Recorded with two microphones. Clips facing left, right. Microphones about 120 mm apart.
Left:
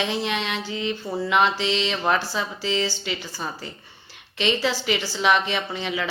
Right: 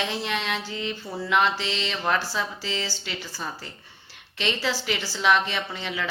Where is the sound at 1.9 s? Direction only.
15° left (ahead or behind).